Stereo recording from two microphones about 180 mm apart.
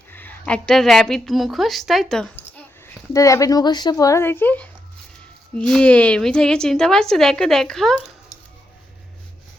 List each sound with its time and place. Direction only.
0.1 s a woman's voice: 10° left (ahead or behind)
2.8 s a woman's voice: 15° left (ahead or behind)